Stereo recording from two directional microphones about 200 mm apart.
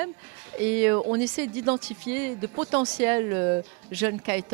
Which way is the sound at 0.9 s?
25° right (ahead or behind).